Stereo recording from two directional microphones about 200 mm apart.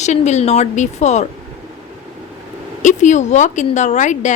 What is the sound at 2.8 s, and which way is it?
Speech, 40° left (ahead or behind).